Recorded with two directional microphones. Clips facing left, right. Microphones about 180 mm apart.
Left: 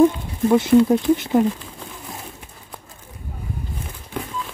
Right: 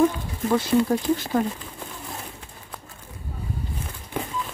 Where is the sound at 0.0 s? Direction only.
20° left (ahead or behind).